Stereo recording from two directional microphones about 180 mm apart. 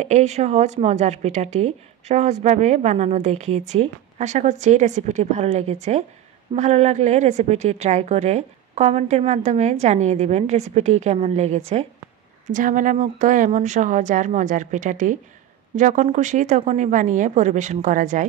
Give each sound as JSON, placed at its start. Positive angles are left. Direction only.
{"t": 0.0, "sound": "a woman's voice", "side_deg": -40}